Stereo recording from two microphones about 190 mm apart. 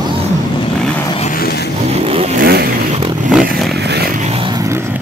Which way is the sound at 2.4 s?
55° right (ahead or behind).